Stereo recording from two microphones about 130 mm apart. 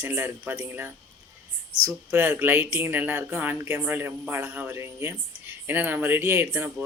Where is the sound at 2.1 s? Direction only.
15° right (ahead or behind).